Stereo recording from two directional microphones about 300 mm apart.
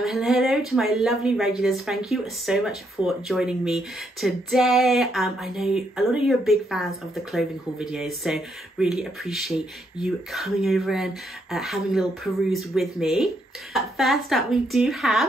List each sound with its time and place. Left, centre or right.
0.0 s speech: centre